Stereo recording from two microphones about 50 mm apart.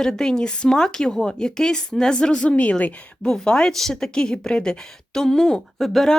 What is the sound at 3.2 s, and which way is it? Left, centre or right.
A woman's voice, centre.